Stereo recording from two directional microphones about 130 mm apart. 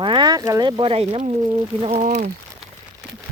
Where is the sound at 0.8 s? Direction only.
50° right (ahead or behind).